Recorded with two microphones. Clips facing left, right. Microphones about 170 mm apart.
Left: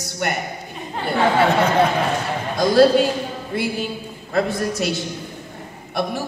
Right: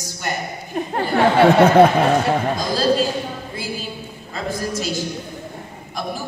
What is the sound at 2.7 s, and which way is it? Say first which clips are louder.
Speech: left 6 dB; 65° left (ahead or behind).